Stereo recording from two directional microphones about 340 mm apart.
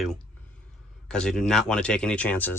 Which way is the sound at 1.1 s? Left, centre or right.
Centre.